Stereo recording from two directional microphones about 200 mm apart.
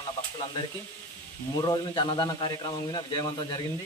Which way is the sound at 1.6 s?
20° left (ahead or behind).